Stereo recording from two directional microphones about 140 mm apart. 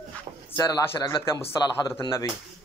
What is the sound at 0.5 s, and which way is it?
Speech, 25° left (ahead or behind).